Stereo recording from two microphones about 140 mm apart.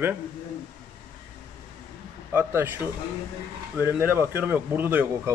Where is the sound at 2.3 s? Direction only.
15° right (ahead or behind).